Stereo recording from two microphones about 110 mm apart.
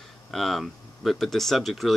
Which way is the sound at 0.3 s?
Centre (ahead or behind).